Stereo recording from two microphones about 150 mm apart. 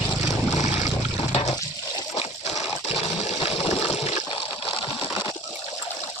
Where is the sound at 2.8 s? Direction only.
45° left (ahead or behind).